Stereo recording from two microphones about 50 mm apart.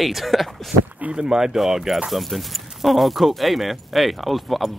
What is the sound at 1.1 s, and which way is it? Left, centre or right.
Speech, centre.